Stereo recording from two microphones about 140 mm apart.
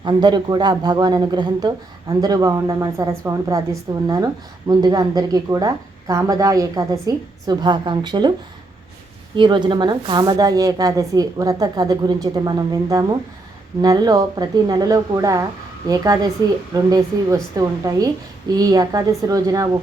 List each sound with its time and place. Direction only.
0.0 s speech: 30° right (ahead or behind)
9.3 s speech: 35° right (ahead or behind)
16.7 s speech: 25° right (ahead or behind)